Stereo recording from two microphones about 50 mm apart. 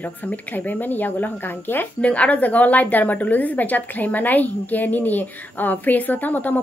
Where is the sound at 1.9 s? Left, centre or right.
Left.